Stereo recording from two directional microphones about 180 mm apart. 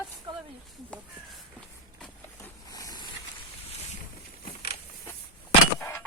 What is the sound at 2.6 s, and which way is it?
Boat, 20° left (ahead or behind).